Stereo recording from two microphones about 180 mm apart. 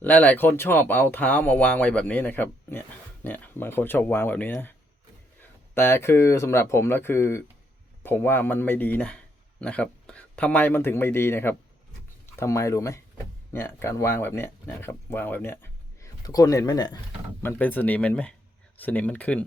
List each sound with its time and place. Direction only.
0.0 s a man's voice: 5° left (ahead or behind)
17.4 s speech: 10° left (ahead or behind)